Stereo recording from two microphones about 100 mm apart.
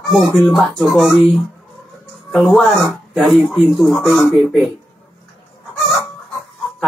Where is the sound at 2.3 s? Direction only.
Centre (ahead or behind).